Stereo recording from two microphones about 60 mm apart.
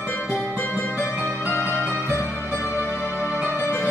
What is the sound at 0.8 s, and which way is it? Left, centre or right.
Music, left.